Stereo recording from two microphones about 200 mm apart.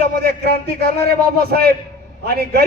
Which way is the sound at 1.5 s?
50° right (ahead or behind).